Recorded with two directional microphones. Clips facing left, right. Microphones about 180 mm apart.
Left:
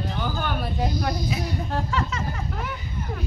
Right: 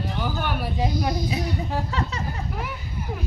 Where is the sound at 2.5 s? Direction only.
10° right (ahead or behind).